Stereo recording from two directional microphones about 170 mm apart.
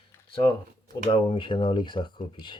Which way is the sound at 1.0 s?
30° left (ahead or behind).